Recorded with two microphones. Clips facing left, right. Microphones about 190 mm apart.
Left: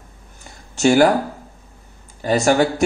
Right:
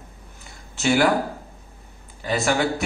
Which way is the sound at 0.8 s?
45° left (ahead or behind).